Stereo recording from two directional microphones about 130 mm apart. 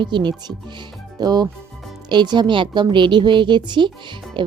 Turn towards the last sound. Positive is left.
turn(degrees=-40)  # may be behind; listen again after turning